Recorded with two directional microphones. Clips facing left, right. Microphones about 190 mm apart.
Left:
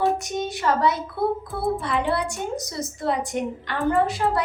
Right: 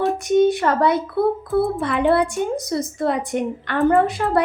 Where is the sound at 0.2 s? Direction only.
55° right (ahead or behind).